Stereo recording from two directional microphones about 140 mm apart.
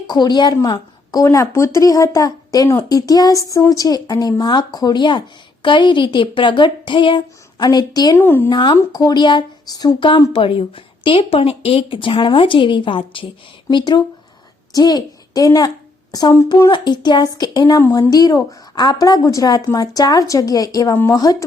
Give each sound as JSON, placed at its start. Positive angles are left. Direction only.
{"t": 0.1, "sound": "a woman's voice", "side_deg": 30}
{"t": 8.2, "sound": "speech", "side_deg": 15}
{"t": 8.4, "sound": "a woman's voice", "side_deg": 30}
{"t": 16.7, "sound": "speech", "side_deg": 35}
{"t": 17.8, "sound": "a woman's voice", "side_deg": 15}